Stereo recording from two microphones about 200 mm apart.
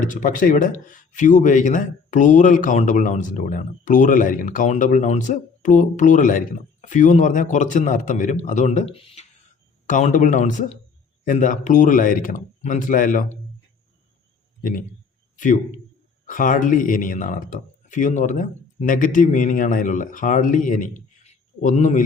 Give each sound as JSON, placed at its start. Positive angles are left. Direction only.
{"t": 0.0, "sound": "speech", "side_deg": 40}
{"t": 9.8, "sound": "speech", "side_deg": 40}
{"t": 15.4, "sound": "speech", "side_deg": 40}